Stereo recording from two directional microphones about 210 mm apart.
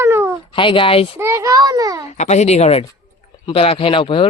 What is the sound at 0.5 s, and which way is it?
Speech, 25° left (ahead or behind).